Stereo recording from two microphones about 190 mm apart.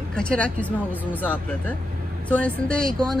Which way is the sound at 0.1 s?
5° left (ahead or behind).